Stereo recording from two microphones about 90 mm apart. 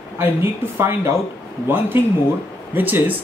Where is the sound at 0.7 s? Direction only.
25° right (ahead or behind).